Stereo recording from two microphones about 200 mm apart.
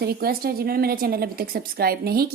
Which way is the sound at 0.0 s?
50° right (ahead or behind).